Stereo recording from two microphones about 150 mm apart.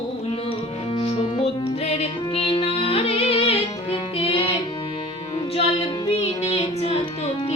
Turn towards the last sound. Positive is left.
turn(degrees=45)  # may be behind; listen again after turning